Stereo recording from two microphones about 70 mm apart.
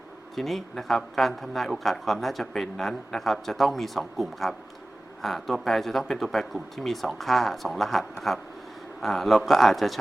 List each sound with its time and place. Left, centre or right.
0.3 s speech: centre